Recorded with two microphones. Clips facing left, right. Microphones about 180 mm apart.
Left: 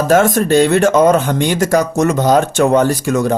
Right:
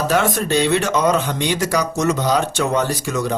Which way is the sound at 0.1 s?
45° left (ahead or behind).